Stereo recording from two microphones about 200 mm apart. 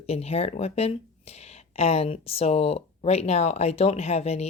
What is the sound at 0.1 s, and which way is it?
Speech, 30° left (ahead or behind).